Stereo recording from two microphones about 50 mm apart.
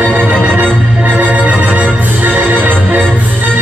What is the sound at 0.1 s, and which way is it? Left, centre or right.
Music, right.